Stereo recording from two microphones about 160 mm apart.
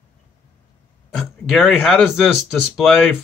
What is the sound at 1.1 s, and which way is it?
Speech, centre (ahead or behind).